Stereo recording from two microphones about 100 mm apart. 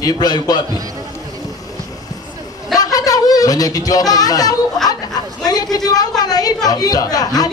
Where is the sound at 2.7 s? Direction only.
35° left (ahead or behind).